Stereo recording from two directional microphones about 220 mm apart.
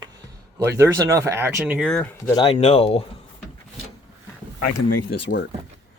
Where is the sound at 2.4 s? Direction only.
25° left (ahead or behind).